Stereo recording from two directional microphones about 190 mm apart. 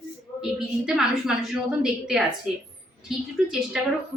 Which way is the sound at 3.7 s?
Centre (ahead or behind).